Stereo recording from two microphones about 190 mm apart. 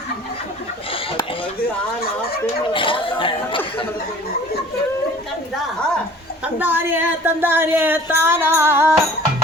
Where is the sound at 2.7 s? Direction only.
25° left (ahead or behind).